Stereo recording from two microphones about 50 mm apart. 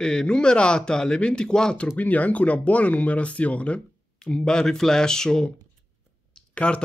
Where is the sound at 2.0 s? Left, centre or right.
Left; by 5.5 s centre.